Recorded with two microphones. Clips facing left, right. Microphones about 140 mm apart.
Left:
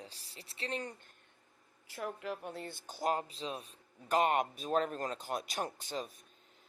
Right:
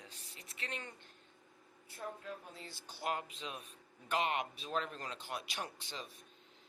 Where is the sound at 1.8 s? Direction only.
90° left; by 3.6 s 35° left (ahead or behind).